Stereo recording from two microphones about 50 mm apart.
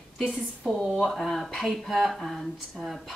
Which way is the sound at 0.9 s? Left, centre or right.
Centre.